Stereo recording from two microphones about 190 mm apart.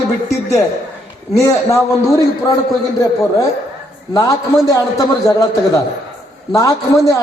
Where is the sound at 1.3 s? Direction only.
15° left (ahead or behind).